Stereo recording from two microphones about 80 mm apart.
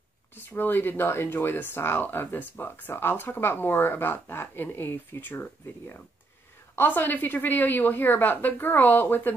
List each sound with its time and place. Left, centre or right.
0.4 s speech: left